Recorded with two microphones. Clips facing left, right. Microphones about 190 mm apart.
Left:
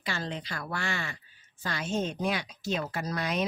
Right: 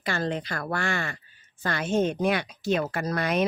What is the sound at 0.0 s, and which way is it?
Speech, 50° right (ahead or behind).